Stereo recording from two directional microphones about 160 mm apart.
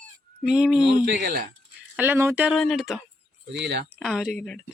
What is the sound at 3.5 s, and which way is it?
Speech, 90° right.